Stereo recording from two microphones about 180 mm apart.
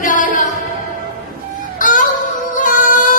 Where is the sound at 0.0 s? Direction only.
45° left (ahead or behind).